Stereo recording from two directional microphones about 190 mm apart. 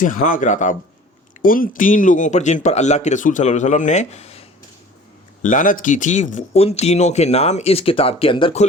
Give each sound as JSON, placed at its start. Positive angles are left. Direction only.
{"t": 0.0, "sound": "speech", "side_deg": 45}
{"t": 5.4, "sound": "speech", "side_deg": 45}